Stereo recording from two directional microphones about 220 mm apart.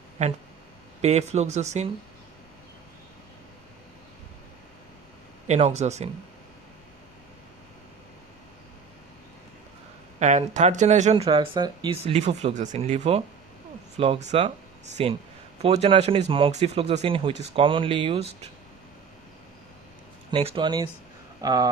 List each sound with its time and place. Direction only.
0.2 s speech: 30° right (ahead or behind)
5.5 s speech: 30° right (ahead or behind)
10.2 s speech: 35° right (ahead or behind)
20.3 s speech: 25° right (ahead or behind)